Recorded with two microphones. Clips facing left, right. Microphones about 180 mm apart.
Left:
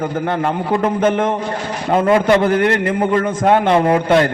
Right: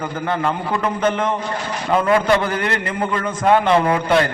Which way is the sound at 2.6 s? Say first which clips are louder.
Left 6 dB; 60° left (ahead or behind).